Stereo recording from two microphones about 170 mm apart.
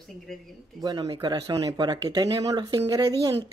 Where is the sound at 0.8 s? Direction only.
20° right (ahead or behind).